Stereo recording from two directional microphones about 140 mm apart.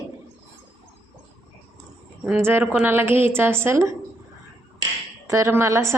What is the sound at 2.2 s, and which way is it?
Speech, 10° right (ahead or behind).